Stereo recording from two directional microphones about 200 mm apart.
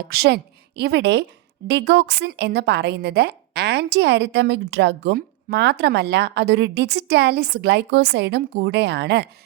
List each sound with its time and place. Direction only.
0.1 s a woman's voice: 50° right (ahead or behind)